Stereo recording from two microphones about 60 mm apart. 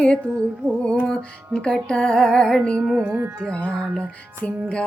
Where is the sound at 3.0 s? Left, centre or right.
Right.